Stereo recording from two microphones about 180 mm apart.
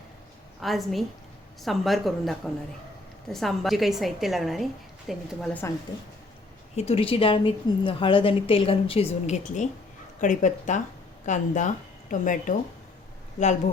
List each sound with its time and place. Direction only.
0.6 s a woman's voice: centre (ahead or behind)
6.7 s a woman's voice: 35° left (ahead or behind)